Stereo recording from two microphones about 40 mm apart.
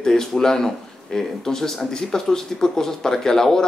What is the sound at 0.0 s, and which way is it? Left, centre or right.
Speech, centre.